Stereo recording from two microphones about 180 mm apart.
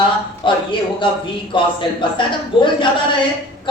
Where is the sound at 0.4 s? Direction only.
25° left (ahead or behind).